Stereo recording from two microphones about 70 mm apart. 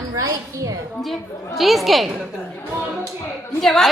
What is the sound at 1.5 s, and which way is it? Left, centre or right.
Speech, centre.